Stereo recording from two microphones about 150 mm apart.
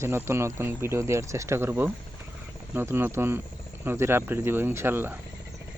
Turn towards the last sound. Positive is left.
turn(degrees=-15)  # may be behind; listen again after turning